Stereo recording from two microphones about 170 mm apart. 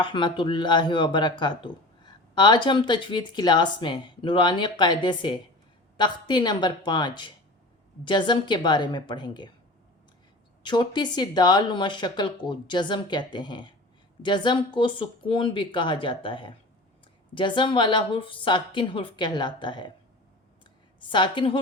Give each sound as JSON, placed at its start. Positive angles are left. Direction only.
{"t": 0.0, "sound": "speech", "side_deg": 25}
{"t": 10.6, "sound": "speech", "side_deg": 25}
{"t": 21.1, "sound": "speech", "side_deg": 30}